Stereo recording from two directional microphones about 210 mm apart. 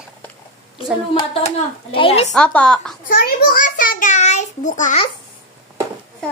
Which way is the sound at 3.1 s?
40° left (ahead or behind).